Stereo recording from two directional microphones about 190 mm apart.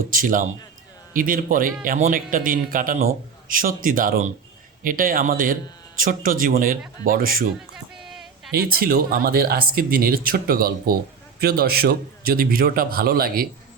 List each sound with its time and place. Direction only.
0.1 s speech: 45° right (ahead or behind)
8.1 s a sound: centre (ahead or behind)
8.5 s speech: 50° right (ahead or behind)